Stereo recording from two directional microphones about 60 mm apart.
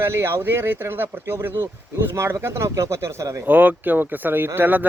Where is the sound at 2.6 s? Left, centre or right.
Right.